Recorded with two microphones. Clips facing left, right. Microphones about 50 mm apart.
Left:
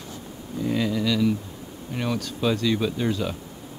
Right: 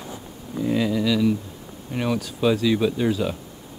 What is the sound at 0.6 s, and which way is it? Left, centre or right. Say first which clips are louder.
Speech: right 2 dB; centre.